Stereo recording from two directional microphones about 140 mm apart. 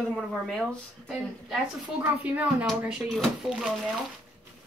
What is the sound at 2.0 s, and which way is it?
Speech, 10° right (ahead or behind).